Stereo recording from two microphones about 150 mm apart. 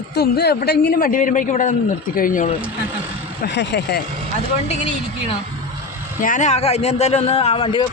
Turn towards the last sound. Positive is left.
turn(degrees=40)  # may be behind; listen again after turning